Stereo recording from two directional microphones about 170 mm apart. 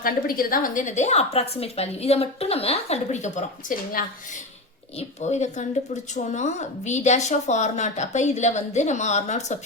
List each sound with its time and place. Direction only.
0.0 s a woman's voice: 55° left (ahead or behind)